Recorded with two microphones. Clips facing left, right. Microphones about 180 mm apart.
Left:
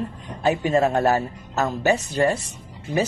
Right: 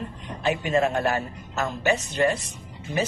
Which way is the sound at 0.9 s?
40° left (ahead or behind).